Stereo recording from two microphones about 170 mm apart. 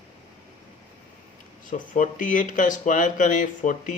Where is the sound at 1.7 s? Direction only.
50° left (ahead or behind).